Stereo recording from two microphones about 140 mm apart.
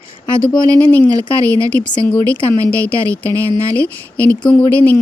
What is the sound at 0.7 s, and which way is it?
Speech, 10° left (ahead or behind).